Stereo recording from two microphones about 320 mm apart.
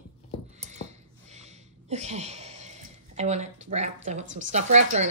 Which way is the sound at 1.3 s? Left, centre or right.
Right.